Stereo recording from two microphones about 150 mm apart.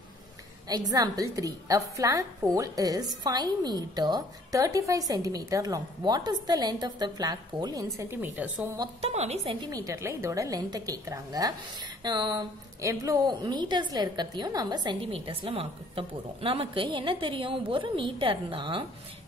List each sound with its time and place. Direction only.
0.7 s a woman's voice: 25° right (ahead or behind)
9.0 s a woman's voice: 45° right (ahead or behind)
9.6 s a woman's voice: 25° right (ahead or behind)